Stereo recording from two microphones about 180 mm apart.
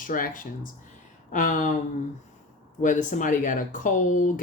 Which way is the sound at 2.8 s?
45° left (ahead or behind).